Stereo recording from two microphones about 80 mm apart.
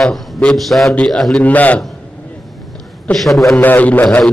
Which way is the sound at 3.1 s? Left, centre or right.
Centre.